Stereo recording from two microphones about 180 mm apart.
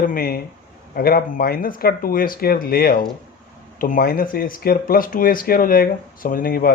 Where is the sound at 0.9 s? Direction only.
55° left (ahead or behind).